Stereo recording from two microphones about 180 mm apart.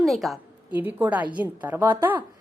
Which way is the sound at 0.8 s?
10° right (ahead or behind).